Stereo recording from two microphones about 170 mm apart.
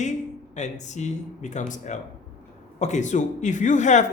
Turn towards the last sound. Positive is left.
turn(degrees=45)  # may be behind; listen again after turning